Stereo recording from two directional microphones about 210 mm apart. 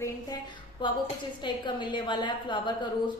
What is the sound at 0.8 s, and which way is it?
A woman's voice, 20° left (ahead or behind).